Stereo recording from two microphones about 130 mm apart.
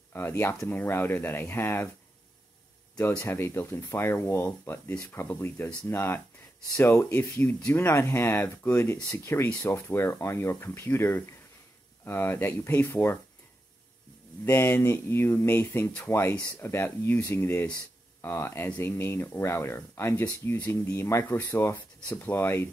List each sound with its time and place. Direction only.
0.1 s speech: 20° left (ahead or behind)
3.2 s speech: 20° left (ahead or behind)
14.4 s speech: 20° left (ahead or behind)